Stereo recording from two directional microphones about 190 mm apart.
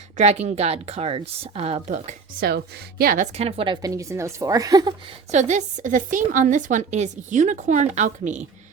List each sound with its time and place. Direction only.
0.2 s a woman's voice: 35° right (ahead or behind)
2.5 s a woman's voice: 60° right (ahead or behind)
3.3 s a woman's voice: 30° right (ahead or behind)
5.3 s a woman's voice: 40° right (ahead or behind)